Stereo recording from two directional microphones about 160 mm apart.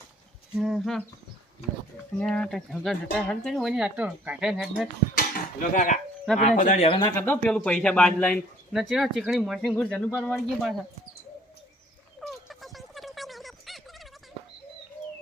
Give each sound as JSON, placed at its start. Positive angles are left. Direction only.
{"t": 0.5, "sound": "speech", "side_deg": 0}
{"t": 2.1, "sound": "speech", "side_deg": 5}
{"t": 5.1, "sound": "speech", "side_deg": 60}
{"t": 6.8, "sound": "speech", "side_deg": 35}
{"t": 7.2, "sound": "speech", "side_deg": 10}
{"t": 12.2, "sound": "a sound", "side_deg": 0}